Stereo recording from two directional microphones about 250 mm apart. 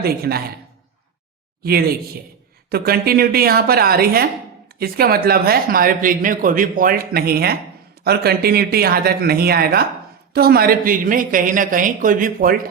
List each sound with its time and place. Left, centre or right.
0.0 s speech: right
1.6 s speech: right